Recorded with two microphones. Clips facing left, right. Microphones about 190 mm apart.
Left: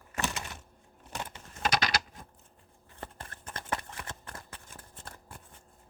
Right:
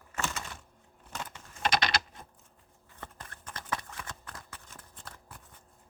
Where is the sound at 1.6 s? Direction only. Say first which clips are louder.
Right 1 dB; 45° left (ahead or behind).